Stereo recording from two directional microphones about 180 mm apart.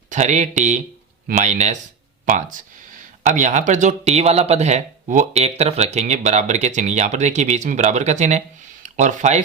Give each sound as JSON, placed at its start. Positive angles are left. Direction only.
{"t": 0.1, "sound": "speech", "side_deg": -40}